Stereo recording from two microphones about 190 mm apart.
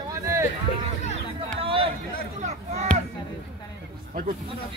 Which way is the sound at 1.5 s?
30° right (ahead or behind).